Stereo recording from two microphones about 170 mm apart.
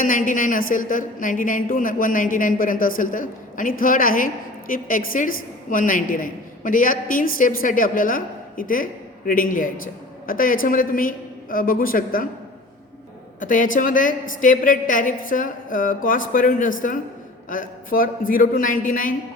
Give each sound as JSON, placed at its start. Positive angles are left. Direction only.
{"t": 0.0, "sound": "a woman's voice", "side_deg": 50}
{"t": 13.4, "sound": "a woman's voice", "side_deg": 50}